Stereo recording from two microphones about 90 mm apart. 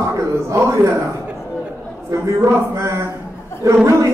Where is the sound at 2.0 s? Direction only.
35° right (ahead or behind).